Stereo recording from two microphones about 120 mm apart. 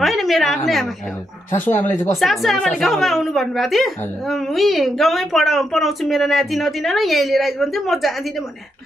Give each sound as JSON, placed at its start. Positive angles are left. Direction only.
{"t": 0.0, "sound": "a sound", "side_deg": 0}
{"t": 1.8, "sound": "speech", "side_deg": 15}
{"t": 2.1, "sound": "speech", "side_deg": 0}